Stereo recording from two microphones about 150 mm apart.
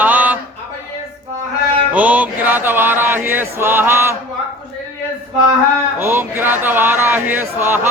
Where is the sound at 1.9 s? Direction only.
10° right (ahead or behind).